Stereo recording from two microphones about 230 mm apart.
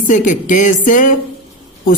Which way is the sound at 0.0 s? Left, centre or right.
Left.